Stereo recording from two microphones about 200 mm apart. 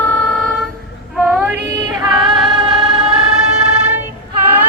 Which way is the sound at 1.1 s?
5° right (ahead or behind).